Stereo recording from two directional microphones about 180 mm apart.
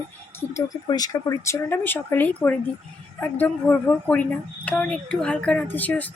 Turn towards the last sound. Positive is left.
turn(degrees=10)  # may be behind; listen again after turning